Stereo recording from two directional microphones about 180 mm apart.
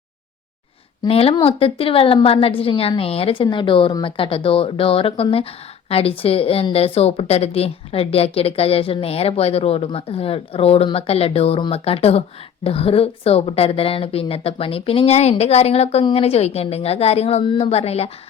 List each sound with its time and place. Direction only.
1.0 s a woman's voice: 30° left (ahead or behind)